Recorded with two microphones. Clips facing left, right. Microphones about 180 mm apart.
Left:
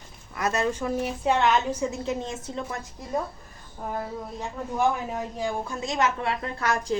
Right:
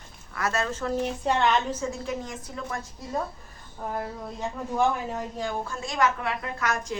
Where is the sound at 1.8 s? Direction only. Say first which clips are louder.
Left 3 dB; 20° left (ahead or behind).